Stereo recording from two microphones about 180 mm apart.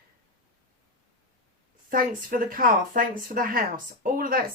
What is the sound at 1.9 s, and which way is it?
A woman's voice, 50° right (ahead or behind).